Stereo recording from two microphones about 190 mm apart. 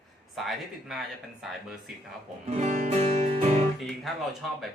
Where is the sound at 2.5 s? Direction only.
35° right (ahead or behind).